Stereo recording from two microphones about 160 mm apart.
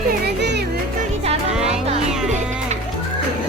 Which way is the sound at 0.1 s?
90° right.